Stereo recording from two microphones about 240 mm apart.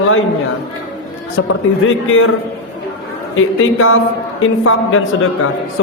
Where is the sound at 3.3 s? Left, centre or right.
Left.